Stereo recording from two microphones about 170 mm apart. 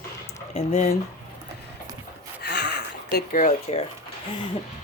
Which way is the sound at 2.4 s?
80° left.